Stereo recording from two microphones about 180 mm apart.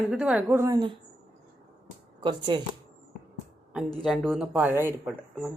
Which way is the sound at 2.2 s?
25° right (ahead or behind).